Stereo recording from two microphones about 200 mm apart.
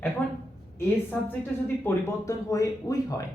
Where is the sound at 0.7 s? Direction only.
10° left (ahead or behind).